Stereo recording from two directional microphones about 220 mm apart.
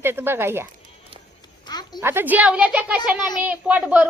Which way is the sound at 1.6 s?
20° left (ahead or behind).